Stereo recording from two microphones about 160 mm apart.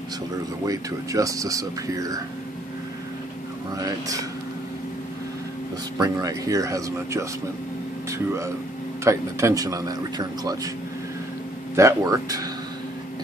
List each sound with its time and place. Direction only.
0.7 s speech: 20° right (ahead or behind)
3.7 s speech: 20° right (ahead or behind)
5.9 s speech: 25° right (ahead or behind)
9.0 s speech: 15° right (ahead or behind)
11.7 s speech: 20° right (ahead or behind)